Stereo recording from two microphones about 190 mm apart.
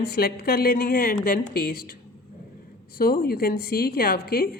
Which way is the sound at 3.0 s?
50° left (ahead or behind).